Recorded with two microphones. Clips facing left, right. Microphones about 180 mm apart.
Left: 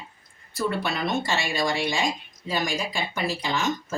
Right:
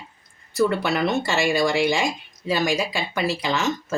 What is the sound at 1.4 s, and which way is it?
Speech, 80° right.